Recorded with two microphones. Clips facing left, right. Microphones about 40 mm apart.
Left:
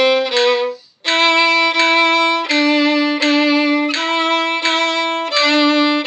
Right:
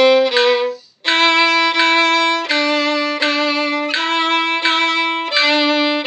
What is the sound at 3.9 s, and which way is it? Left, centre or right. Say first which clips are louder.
Violin: even; centre.